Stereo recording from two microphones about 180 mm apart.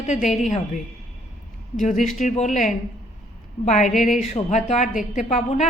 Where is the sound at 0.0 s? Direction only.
40° left (ahead or behind).